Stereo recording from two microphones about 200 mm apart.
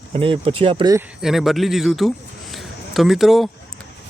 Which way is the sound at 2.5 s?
Centre (ahead or behind).